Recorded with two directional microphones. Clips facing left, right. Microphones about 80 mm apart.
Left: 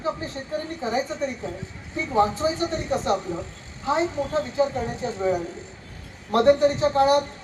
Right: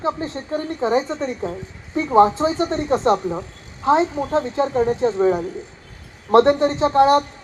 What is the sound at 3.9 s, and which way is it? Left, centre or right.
Speech, right.